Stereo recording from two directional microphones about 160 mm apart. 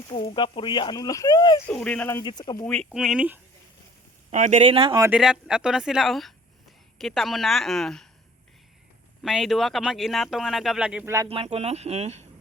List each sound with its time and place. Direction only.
0.1 s speech: 30° left (ahead or behind)
1.6 s speech: 5° left (ahead or behind)
2.2 s speech: 25° left (ahead or behind)
2.6 s speech: centre (ahead or behind)
4.3 s speech: 45° right (ahead or behind)
5.1 s speech: 5° right (ahead or behind)
9.2 s speech: centre (ahead or behind)
11.3 s speech: 40° right (ahead or behind)